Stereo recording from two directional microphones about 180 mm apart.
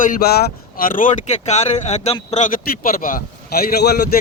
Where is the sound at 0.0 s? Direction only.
55° left (ahead or behind).